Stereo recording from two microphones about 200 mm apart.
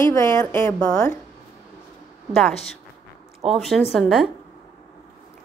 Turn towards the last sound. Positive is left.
turn(degrees=0)  # may be behind; listen again after turning